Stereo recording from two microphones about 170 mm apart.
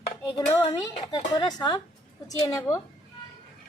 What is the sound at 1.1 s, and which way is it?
A woman's voice, 30° left (ahead or behind).